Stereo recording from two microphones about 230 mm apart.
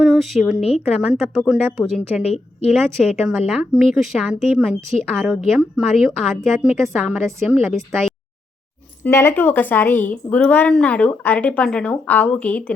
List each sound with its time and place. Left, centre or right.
0.0 s a woman's voice: centre
2.3 s a woman's voice: left
2.7 s a woman's voice: centre